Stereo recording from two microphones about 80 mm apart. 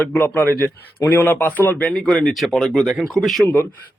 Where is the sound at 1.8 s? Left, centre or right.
Centre.